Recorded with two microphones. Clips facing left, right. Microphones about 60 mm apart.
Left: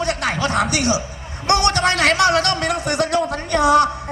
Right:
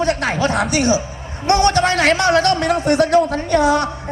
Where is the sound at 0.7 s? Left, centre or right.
Right.